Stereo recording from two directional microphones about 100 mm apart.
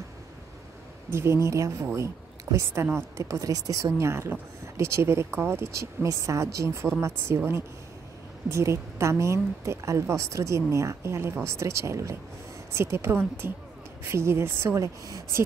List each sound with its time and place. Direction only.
1.1 s speech: 30° right (ahead or behind)